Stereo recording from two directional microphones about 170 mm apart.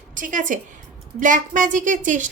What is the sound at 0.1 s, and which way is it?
A woman's voice, 50° right (ahead or behind).